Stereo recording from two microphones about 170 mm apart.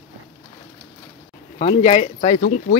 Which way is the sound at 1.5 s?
40° left (ahead or behind).